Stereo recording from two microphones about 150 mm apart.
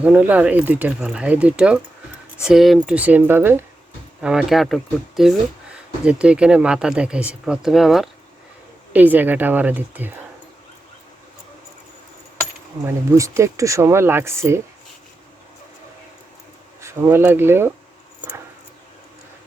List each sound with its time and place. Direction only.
0.0 s speech: 10° right (ahead or behind)
4.2 s speech: 5° right (ahead or behind)
8.9 s speech: 10° right (ahead or behind)
12.8 s speech: 20° right (ahead or behind)
16.8 s speech: 15° right (ahead or behind)